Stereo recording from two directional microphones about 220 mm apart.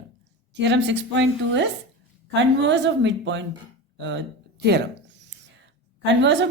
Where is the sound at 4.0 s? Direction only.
55° right (ahead or behind).